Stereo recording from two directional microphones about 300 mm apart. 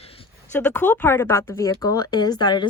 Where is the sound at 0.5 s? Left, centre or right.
Centre.